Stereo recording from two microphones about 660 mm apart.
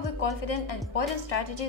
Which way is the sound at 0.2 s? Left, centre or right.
Left.